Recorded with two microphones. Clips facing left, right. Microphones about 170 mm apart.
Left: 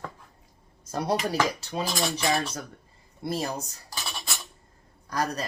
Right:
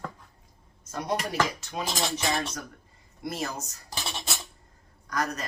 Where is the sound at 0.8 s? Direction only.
35° left (ahead or behind).